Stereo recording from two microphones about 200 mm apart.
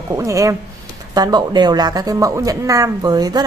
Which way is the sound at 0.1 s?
15° right (ahead or behind).